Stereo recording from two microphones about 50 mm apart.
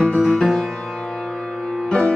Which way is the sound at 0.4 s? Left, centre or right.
Centre.